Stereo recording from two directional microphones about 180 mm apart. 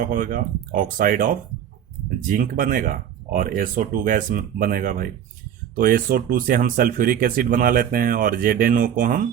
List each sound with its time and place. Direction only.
0.0 s speech: 50° right (ahead or behind)